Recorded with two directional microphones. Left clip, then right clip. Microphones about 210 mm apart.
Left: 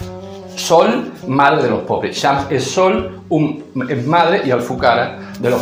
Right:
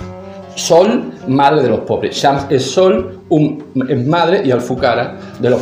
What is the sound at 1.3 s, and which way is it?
A man's voice, 50° right (ahead or behind).